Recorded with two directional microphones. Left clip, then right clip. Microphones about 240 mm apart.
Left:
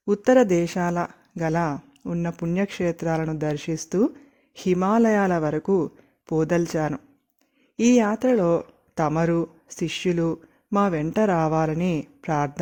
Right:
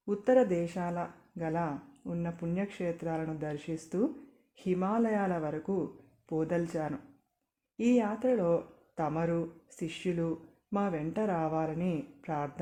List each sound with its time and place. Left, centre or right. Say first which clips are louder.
0.0 s speech: left 8 dB; left